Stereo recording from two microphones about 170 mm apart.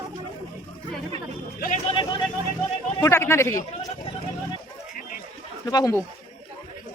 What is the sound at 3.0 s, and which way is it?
Speech, 15° left (ahead or behind).